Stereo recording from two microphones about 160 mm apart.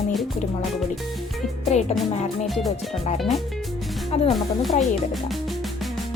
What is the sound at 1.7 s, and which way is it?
Speech, 45° left (ahead or behind).